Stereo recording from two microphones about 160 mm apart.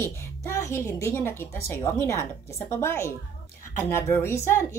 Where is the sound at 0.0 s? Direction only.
15° left (ahead or behind).